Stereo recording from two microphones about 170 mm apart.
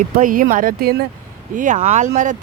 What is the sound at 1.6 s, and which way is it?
Speech, 45° right (ahead or behind).